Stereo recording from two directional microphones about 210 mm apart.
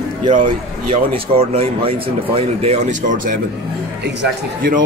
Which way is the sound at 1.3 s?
25° right (ahead or behind).